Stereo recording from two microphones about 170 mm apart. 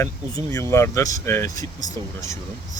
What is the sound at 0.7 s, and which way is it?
Speech, 15° left (ahead or behind).